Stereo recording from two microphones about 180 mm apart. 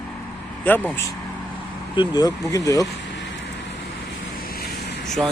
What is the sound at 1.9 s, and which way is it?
Speech, 20° left (ahead or behind).